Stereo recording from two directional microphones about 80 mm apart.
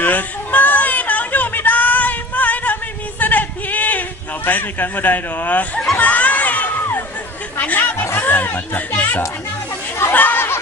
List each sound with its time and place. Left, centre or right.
0.0 s a sound: left
4.5 s speech: left
5.9 s crowd: centre
7.5 s chatter: left
8.0 s speech: left
10.1 s chatter: left